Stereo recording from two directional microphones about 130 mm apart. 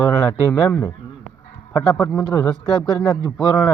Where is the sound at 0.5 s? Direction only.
10° left (ahead or behind).